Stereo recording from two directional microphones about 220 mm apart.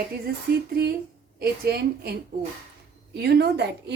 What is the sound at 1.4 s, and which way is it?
Speech, 45° right (ahead or behind).